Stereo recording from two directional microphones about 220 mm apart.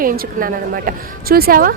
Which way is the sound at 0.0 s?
40° right (ahead or behind).